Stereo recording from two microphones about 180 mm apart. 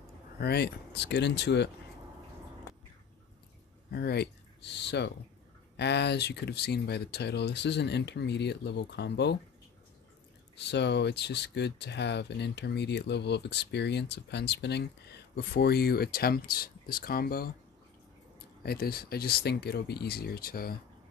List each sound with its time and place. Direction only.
0.4 s speech: 65° left (ahead or behind)
3.9 s speech: 65° left (ahead or behind)
10.5 s speech: 70° left (ahead or behind)
18.6 s speech: 60° left (ahead or behind)